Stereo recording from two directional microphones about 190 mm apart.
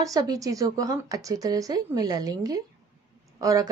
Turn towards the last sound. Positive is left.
turn(degrees=-15)  # may be behind; listen again after turning